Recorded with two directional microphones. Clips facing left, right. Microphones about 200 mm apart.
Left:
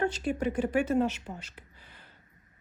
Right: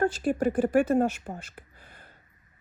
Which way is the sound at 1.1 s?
50° right (ahead or behind).